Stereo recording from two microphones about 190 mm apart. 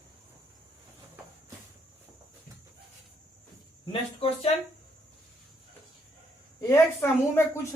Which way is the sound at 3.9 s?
30° left (ahead or behind).